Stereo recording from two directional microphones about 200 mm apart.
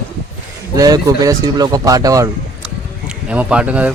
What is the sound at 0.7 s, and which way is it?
Speech, 20° right (ahead or behind).